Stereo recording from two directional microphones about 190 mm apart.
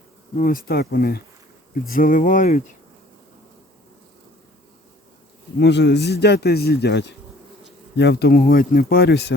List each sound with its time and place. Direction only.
0.3 s speech: 45° left (ahead or behind)
5.5 s speech: 65° left (ahead or behind)